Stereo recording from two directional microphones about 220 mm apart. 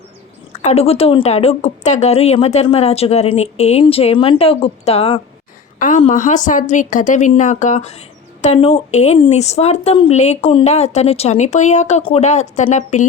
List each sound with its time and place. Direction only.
0.6 s a woman's voice: 30° left (ahead or behind)